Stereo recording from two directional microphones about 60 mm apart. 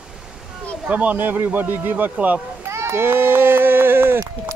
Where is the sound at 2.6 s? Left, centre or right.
Right.